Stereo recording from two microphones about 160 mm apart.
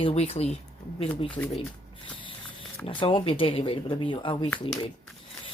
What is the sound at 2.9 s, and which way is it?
Speech, 35° left (ahead or behind).